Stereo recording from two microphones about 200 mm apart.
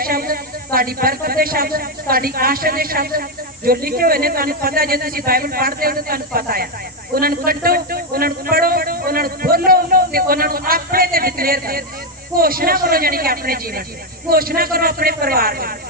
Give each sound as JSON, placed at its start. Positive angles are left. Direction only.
{"t": 0.0, "sound": "a woman's voice", "side_deg": -45}